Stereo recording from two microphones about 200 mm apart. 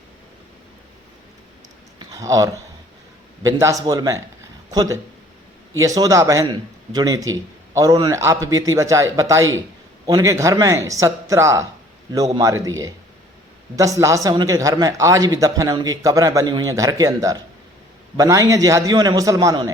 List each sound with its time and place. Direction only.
2.1 s speech: 15° right (ahead or behind)